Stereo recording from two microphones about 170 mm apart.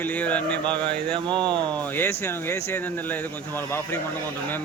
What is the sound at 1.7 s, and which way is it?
Speech, 10° left (ahead or behind).